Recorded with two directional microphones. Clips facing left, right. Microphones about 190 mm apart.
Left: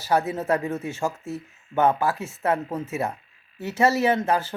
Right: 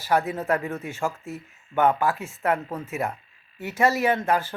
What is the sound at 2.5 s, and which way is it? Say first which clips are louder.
Speech: left 1 dB; 25° left (ahead or behind).